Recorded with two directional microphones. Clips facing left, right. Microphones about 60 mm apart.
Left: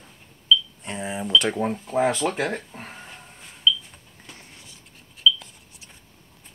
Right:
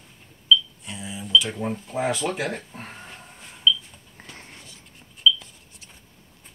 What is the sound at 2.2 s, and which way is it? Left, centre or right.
Speech, centre.